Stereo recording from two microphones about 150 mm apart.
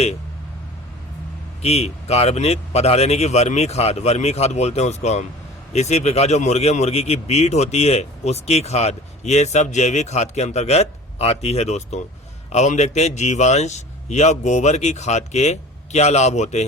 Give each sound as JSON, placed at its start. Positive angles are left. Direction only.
{"t": 1.6, "sound": "speech", "side_deg": 45}